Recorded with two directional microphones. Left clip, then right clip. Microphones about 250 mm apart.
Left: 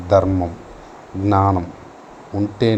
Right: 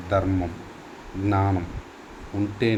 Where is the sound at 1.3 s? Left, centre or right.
Centre.